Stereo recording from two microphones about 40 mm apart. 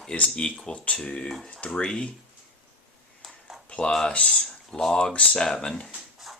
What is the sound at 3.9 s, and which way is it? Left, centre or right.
Speech, centre.